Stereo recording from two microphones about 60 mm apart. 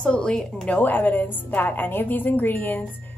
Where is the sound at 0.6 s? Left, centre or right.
Left.